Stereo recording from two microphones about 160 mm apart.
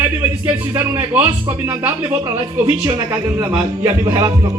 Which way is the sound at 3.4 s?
10° right (ahead or behind).